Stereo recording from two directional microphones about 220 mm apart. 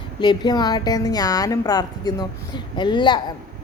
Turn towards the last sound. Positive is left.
turn(degrees=20)  # may be behind; listen again after turning